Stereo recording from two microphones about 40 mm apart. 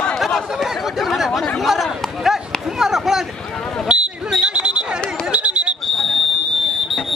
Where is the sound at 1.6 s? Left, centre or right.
Centre.